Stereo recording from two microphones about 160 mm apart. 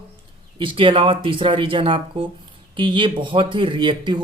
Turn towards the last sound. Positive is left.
turn(degrees=-30)  # may be behind; listen again after turning